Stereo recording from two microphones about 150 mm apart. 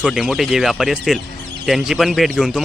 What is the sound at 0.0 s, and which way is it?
A man's voice, centre (ahead or behind).